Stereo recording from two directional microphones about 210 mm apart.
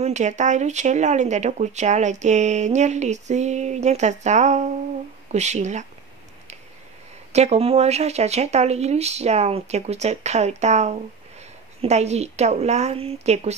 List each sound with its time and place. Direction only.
0.0 s speech: 35° right (ahead or behind)
7.3 s speech: 30° right (ahead or behind)